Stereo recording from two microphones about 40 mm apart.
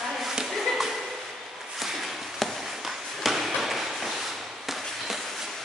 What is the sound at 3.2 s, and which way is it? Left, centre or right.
Tap, centre.